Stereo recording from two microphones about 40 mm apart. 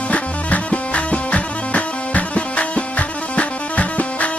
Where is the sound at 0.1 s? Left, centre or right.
Left.